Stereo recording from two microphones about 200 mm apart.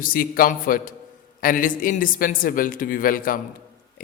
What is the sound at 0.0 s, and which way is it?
Speech, 45° left (ahead or behind).